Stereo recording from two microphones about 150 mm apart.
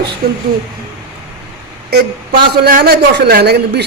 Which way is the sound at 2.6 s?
80° right.